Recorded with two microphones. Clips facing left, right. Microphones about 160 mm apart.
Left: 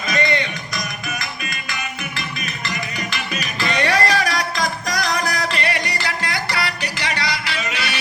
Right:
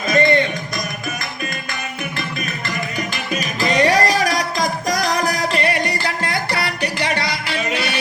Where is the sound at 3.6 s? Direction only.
40° right (ahead or behind).